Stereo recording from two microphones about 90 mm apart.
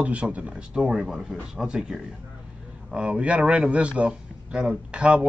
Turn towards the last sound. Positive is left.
turn(degrees=-10)  # may be behind; listen again after turning